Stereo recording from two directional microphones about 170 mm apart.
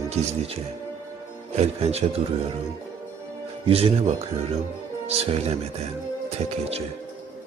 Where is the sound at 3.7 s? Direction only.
35° right (ahead or behind).